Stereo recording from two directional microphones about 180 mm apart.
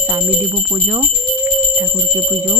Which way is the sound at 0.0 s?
20° right (ahead or behind).